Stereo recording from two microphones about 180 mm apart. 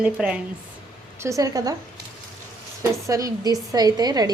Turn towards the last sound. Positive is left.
turn(degrees=-20)  # may be behind; listen again after turning